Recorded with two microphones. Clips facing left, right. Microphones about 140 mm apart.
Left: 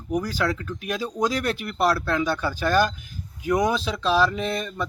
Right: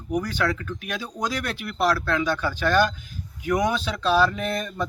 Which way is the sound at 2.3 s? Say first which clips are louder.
Even; 10° left (ahead or behind).